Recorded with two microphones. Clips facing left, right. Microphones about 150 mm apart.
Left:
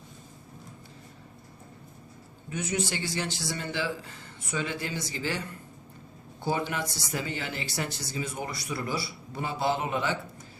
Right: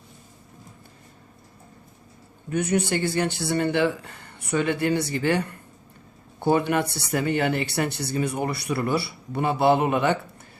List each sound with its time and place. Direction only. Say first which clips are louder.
2.5 s speech: right 8 dB; 60° right (ahead or behind)